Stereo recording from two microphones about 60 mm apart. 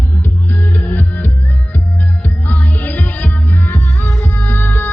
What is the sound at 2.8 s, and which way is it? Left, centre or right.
Music, left.